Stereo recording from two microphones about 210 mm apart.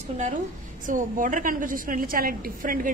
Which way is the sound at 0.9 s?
40° right (ahead or behind).